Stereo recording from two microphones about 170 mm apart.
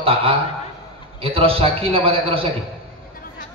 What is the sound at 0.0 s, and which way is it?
A man's voice, 35° right (ahead or behind).